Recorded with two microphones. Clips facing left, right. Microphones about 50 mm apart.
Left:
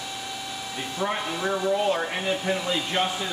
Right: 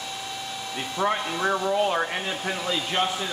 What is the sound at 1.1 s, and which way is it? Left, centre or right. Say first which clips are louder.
Speech: right 1 dB; centre.